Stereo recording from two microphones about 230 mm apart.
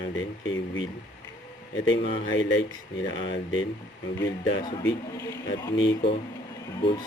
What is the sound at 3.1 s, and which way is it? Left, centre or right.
Speech, left.